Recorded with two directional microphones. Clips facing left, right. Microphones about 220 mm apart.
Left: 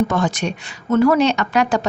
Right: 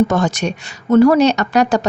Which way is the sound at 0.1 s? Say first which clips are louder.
Right 3 dB; 45° right (ahead or behind).